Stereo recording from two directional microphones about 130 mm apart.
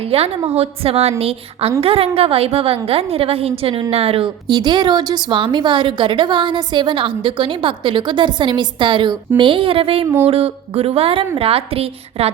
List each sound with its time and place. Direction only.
0.1 s a woman's voice: 50° right (ahead or behind)
4.4 s a woman's voice: 35° right (ahead or behind); by 12.3 s 50° right (ahead or behind)